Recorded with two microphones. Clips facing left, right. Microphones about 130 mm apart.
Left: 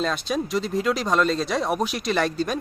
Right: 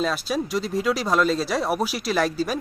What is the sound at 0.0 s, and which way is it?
Speech, 5° right (ahead or behind).